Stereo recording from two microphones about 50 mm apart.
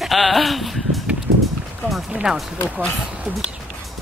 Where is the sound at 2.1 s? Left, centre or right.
Centre.